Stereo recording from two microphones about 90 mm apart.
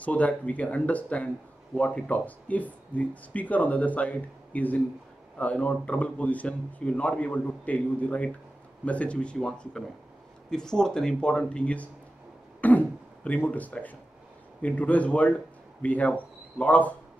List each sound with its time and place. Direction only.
0.0 s speech: 15° left (ahead or behind)
12.5 s throat clearing: 20° left (ahead or behind)
14.6 s speech: 15° left (ahead or behind)